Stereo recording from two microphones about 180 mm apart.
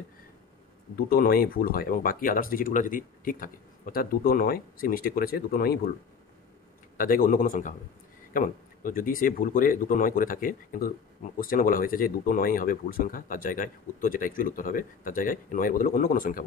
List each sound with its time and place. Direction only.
0.9 s speech: 60° left (ahead or behind)
7.0 s speech: 50° left (ahead or behind)